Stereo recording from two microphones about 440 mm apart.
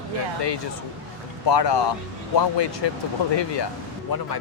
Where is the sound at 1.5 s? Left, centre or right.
Left.